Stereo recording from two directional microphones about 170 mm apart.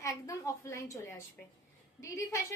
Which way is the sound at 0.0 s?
20° left (ahead or behind).